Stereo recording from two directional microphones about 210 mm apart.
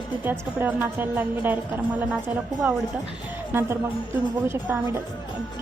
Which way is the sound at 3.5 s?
10° right (ahead or behind).